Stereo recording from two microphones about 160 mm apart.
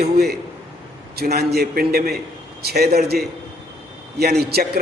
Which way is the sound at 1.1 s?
80° right.